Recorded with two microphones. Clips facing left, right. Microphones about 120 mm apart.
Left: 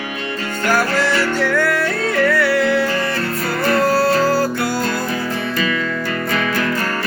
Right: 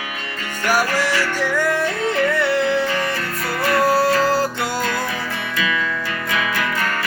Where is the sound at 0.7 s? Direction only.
15° right (ahead or behind).